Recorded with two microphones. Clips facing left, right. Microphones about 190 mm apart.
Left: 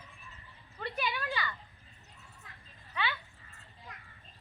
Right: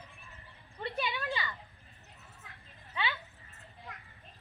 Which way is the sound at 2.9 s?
20° right (ahead or behind).